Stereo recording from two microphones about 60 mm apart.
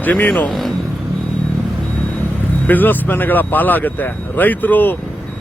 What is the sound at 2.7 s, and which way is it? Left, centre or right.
Speech, left.